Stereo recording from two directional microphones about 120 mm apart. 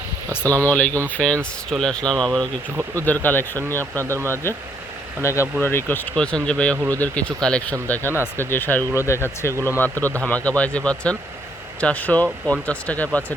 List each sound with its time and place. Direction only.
0.3 s speech: 15° left (ahead or behind)
2.9 s speech: 15° left (ahead or behind)